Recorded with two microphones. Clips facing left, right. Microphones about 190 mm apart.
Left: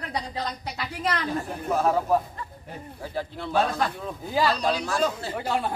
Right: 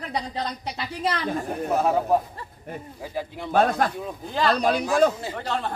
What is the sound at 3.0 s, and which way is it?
Speech, 15° right (ahead or behind).